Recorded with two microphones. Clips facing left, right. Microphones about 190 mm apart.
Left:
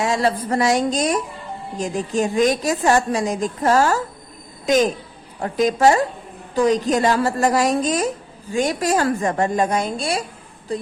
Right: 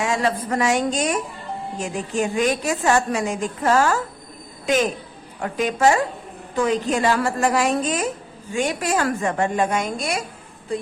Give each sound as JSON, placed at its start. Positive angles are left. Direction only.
{"t": 0.0, "sound": "a woman's voice", "side_deg": 35}